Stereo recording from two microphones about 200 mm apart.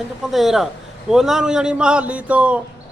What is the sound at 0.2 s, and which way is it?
A man's voice, centre (ahead or behind).